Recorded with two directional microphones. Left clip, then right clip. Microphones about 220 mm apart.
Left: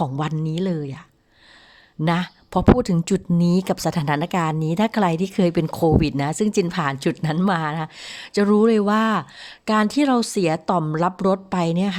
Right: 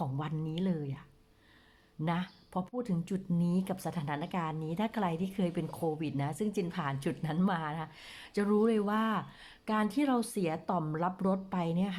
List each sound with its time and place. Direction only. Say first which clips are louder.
0.0 s speech: left 13 dB; 40° left (ahead or behind)
2.0 s speech: left 13 dB; 40° left (ahead or behind)